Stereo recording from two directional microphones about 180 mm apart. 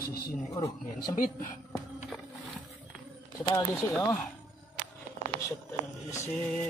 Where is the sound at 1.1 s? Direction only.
45° left (ahead or behind).